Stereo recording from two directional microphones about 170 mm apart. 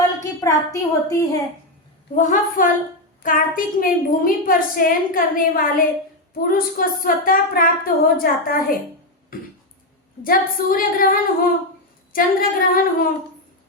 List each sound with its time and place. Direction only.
0.2 s a woman's voice: 20° left (ahead or behind)
2.1 s a woman's voice: 50° left (ahead or behind)
10.2 s a woman's voice: 60° left (ahead or behind)